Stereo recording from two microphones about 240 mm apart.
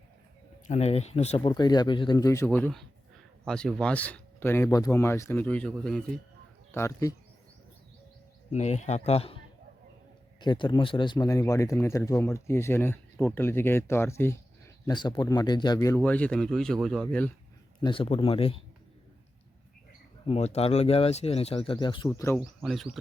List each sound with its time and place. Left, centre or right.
0.7 s speech: left
8.5 s speech: left
10.4 s speech: centre
17.8 s speech: left
20.2 s speech: left
22.4 s speech: centre